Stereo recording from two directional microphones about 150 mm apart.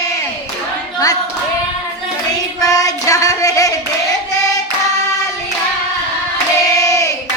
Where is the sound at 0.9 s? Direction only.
25° left (ahead or behind).